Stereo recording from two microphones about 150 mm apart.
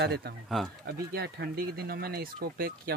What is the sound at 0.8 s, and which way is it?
Speech, 90° right.